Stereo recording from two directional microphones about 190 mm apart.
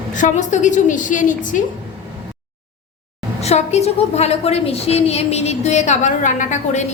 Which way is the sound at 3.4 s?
35° left (ahead or behind).